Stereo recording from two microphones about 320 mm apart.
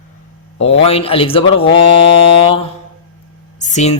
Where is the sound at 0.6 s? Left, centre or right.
Centre.